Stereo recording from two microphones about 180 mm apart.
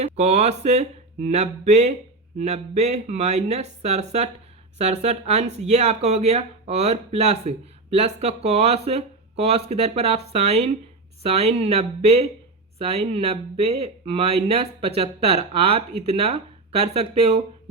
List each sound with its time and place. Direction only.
0.0 s speech: 40° right (ahead or behind)